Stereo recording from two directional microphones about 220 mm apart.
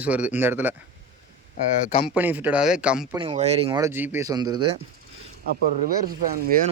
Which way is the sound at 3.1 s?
25° right (ahead or behind).